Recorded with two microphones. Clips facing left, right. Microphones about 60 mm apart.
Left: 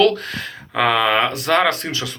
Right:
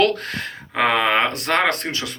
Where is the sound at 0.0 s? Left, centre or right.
Right.